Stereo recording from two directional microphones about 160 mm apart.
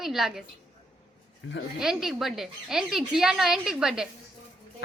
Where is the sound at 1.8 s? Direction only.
5° right (ahead or behind).